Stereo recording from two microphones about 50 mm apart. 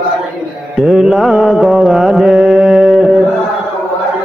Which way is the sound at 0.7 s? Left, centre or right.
Centre.